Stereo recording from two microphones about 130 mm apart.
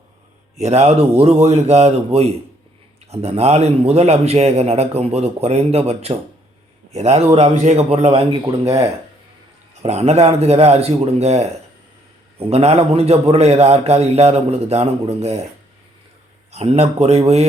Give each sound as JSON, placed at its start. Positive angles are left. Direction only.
{"t": 0.6, "sound": "a man's voice", "side_deg": -50}
{"t": 16.5, "sound": "a man's voice", "side_deg": -55}